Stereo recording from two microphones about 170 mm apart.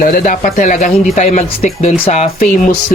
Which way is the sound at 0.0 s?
50° left (ahead or behind).